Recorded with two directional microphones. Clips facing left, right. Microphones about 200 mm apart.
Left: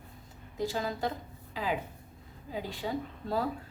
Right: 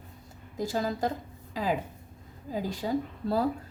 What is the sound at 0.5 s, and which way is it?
Speech, 40° right (ahead or behind).